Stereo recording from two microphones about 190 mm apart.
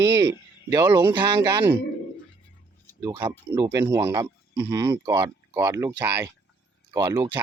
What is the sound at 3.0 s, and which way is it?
A man's voice, 20° right (ahead or behind).